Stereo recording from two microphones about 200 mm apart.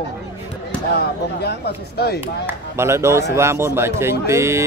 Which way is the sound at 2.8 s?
15° right (ahead or behind).